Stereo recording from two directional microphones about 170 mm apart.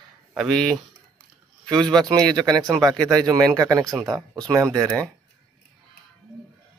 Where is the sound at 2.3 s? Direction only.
20° right (ahead or behind).